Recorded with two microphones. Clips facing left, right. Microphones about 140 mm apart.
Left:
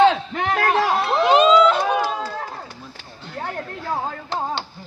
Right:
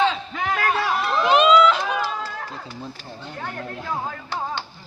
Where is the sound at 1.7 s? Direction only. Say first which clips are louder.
Left 4 dB; 50° left (ahead or behind).